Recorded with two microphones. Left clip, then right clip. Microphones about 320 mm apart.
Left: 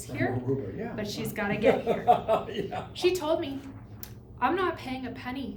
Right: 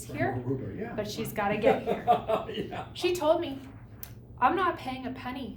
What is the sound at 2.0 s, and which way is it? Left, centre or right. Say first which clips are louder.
Speech: left 2 dB; left.